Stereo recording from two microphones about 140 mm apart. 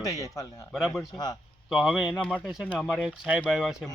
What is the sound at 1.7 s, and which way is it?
Speech, 5° right (ahead or behind).